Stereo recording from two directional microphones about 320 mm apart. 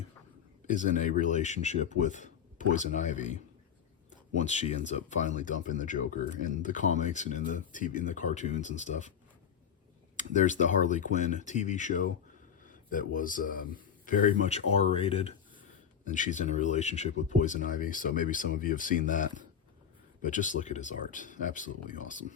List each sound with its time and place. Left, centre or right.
0.7 s speech: left
4.4 s speech: left
10.3 s speech: left
20.3 s speech: left